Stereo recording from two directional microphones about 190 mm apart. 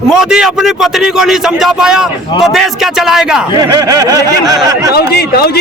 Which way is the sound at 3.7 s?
20° right (ahead or behind).